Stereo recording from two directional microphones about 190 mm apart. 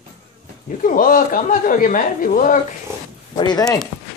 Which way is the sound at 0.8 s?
45° left (ahead or behind).